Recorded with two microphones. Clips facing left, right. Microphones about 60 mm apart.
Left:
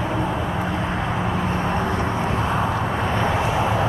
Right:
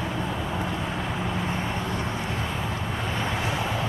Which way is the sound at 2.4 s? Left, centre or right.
Left.